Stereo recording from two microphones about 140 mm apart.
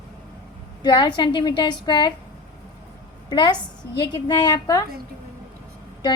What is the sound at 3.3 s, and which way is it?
A woman's voice, 30° left (ahead or behind).